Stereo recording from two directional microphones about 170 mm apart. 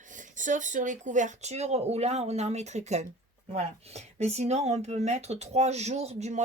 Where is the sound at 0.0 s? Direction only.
50° right (ahead or behind).